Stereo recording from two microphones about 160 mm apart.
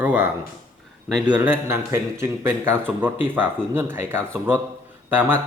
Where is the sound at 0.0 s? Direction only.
15° right (ahead or behind).